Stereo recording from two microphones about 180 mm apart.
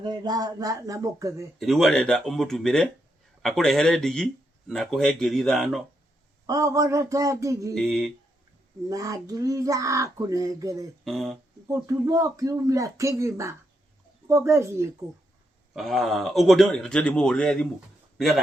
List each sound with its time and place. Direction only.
0.0 s speech: 25° right (ahead or behind)
1.5 s speech: centre (ahead or behind)
6.5 s speech: 20° right (ahead or behind)
7.8 s speech: centre (ahead or behind)
8.9 s speech: 20° right (ahead or behind)
11.0 s speech: centre (ahead or behind)
11.7 s speech: 20° right (ahead or behind)
15.7 s speech: centre (ahead or behind)